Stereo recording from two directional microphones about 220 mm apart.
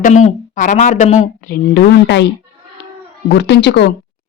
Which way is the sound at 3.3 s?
50° left (ahead or behind).